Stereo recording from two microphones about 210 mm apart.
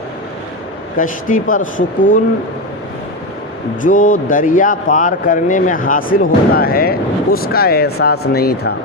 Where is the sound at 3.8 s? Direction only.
40° left (ahead or behind).